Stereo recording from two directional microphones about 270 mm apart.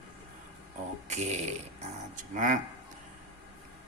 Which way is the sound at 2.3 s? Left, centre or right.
Right.